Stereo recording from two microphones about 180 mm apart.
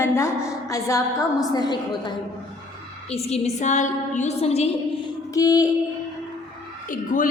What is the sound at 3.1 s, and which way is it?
A woman's voice, 35° left (ahead or behind).